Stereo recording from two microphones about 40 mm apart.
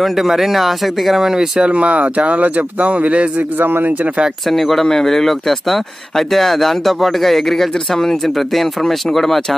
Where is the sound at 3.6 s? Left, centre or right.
Right.